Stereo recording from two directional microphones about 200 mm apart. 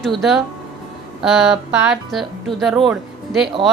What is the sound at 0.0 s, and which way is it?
A woman's voice, centre (ahead or behind).